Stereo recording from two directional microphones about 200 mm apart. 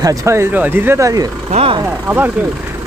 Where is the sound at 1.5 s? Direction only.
30° right (ahead or behind).